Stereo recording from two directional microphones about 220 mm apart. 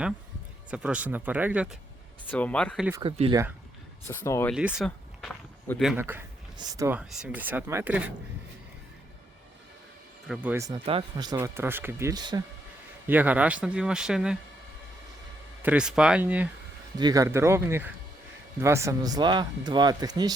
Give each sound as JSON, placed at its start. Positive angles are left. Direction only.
{"t": 0.7, "sound": "speech", "side_deg": -5}
{"t": 2.2, "sound": "speech", "side_deg": 5}
{"t": 3.0, "sound": "speech", "side_deg": -25}
{"t": 4.0, "sound": "speech", "side_deg": 10}
{"t": 4.5, "sound": "speech", "side_deg": -5}
{"t": 10.2, "sound": "speech", "side_deg": -5}
{"t": 10.8, "sound": "speech", "side_deg": -20}
{"t": 13.1, "sound": "speech", "side_deg": -5}
{"t": 15.6, "sound": "speech", "side_deg": -5}